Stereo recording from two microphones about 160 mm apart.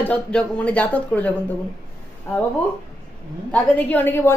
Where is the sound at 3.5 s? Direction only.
10° left (ahead or behind).